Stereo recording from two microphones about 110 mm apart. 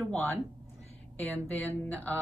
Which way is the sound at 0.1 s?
15° left (ahead or behind).